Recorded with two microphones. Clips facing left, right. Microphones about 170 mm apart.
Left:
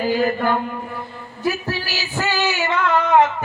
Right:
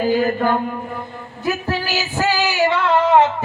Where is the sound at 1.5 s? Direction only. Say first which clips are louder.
Right 2 dB; 50° right (ahead or behind).